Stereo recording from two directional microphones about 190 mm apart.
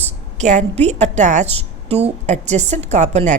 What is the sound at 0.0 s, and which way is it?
A woman's voice, 40° right (ahead or behind).